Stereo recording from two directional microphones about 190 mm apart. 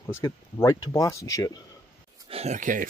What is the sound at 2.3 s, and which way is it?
Speech, 35° right (ahead or behind).